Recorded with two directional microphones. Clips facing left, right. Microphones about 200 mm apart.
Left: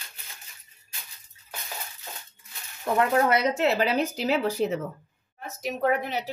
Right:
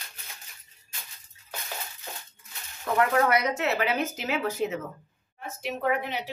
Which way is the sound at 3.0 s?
25° left (ahead or behind).